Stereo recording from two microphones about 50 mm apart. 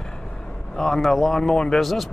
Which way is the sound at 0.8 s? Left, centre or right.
Centre.